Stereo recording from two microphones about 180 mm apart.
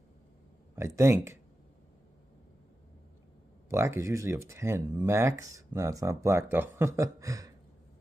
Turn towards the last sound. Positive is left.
turn(degrees=-20)  # may be behind; listen again after turning